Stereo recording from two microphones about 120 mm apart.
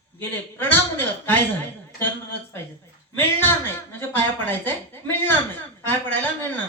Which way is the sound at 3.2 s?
20° left (ahead or behind).